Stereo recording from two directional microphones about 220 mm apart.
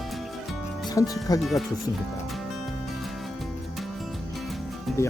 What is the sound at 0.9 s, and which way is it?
Speech, 15° left (ahead or behind).